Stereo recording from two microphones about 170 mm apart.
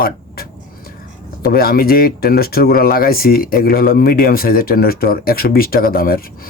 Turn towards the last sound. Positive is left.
turn(degrees=60)  # may be behind; listen again after turning